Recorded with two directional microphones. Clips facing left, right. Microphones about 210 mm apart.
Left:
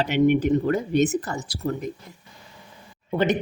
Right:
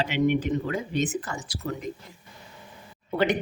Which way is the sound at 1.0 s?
40° left (ahead or behind).